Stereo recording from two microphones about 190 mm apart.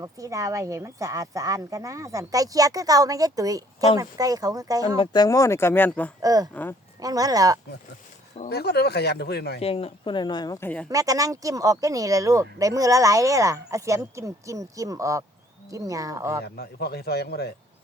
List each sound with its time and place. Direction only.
0.0 s speech: 15° right (ahead or behind)
4.9 s speech: 20° left (ahead or behind)
6.2 s speech: 20° right (ahead or behind)
6.5 s speech: 10° left (ahead or behind)
7.0 s speech: 20° right (ahead or behind)
8.4 s speech: 60° left (ahead or behind)
9.6 s speech: 30° left (ahead or behind); by 10.8 s 10° left (ahead or behind)
10.8 s speech: 20° right (ahead or behind)
16.4 s speech: 60° left (ahead or behind)